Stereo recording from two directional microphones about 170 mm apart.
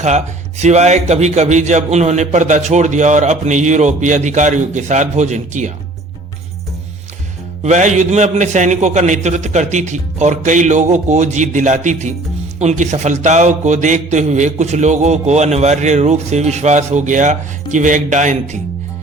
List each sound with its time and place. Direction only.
0.6 s a man's voice: 40° right (ahead or behind)
7.6 s a man's voice: 45° right (ahead or behind)